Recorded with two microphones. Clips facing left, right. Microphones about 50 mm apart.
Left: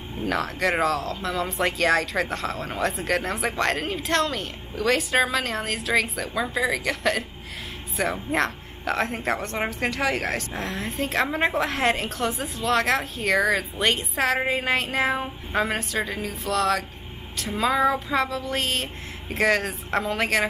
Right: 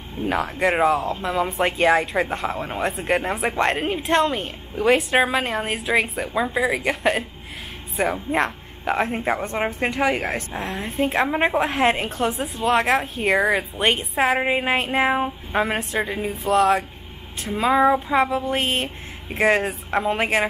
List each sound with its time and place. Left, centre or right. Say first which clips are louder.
0.2 s a woman's voice: right 3 dB; right